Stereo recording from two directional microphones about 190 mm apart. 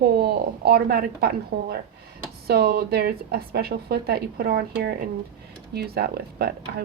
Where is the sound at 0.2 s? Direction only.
55° right (ahead or behind).